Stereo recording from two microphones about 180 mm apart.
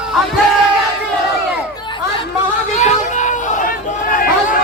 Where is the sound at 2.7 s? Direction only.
40° left (ahead or behind).